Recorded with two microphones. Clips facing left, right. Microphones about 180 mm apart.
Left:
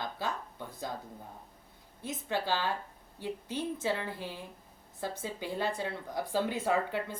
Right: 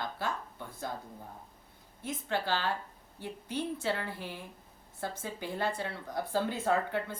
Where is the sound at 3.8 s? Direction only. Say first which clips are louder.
Left 1 dB; 15° left (ahead or behind).